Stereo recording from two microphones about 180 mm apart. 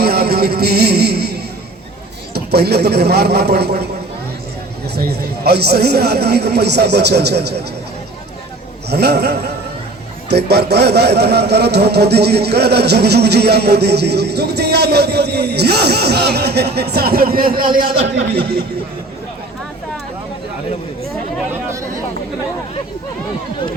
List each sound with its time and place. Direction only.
0.0 s music: 60° right (ahead or behind)
2.3 s a man's voice: 60° right (ahead or behind)
4.9 s a man's voice: 60° right (ahead or behind)
8.9 s a man's voice: 65° right (ahead or behind)
18.1 s speech: 75° right (ahead or behind)